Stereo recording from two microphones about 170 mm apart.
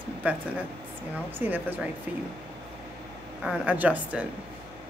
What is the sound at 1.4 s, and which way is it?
Speech, 10° right (ahead or behind).